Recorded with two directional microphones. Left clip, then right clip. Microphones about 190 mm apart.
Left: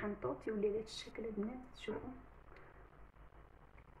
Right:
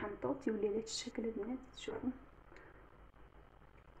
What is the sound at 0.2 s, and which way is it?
Speech, 25° right (ahead or behind).